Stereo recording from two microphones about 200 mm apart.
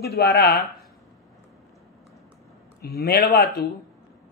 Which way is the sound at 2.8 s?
50° left (ahead or behind).